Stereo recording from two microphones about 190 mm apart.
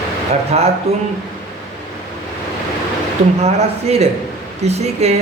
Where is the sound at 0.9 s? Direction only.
35° right (ahead or behind).